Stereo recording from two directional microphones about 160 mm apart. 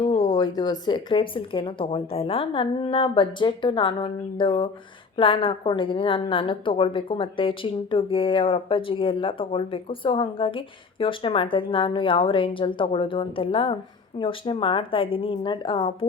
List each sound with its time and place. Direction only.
0.3 s a woman's voice: 25° left (ahead or behind)